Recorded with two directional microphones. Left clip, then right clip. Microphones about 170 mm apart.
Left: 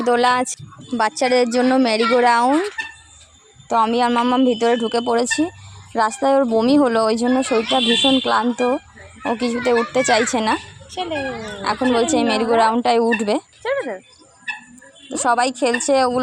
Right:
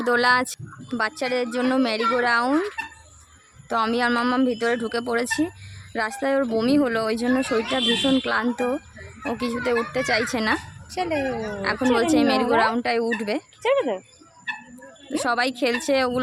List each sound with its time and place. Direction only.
0.0 s a woman's voice: 15° left (ahead or behind)
0.9 s a woman's voice: 30° left (ahead or behind)
2.4 s a woman's voice: 10° left (ahead or behind)
3.7 s a woman's voice: 15° left (ahead or behind)
10.3 s a woman's voice: 15° left (ahead or behind)
10.9 s speech: centre (ahead or behind)
11.3 s a woman's voice: 15° left (ahead or behind)
13.6 s speech: 15° right (ahead or behind)
15.2 s a woman's voice: 10° left (ahead or behind)